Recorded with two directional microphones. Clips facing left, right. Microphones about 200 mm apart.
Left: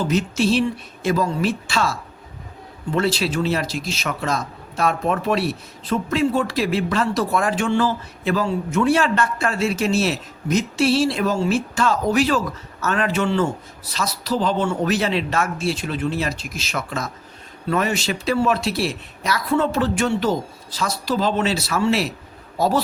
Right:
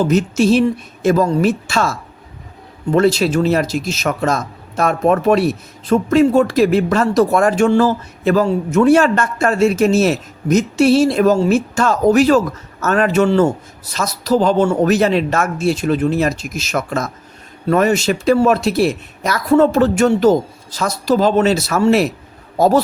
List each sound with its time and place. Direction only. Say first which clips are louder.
0.0 s a man's voice: right 6 dB; 45° right (ahead or behind)